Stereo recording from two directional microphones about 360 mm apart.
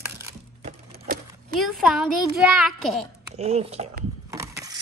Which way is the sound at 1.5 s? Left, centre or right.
Centre.